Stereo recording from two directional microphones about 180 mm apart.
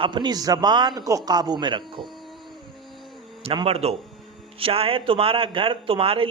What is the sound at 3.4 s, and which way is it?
A man's voice, 30° right (ahead or behind).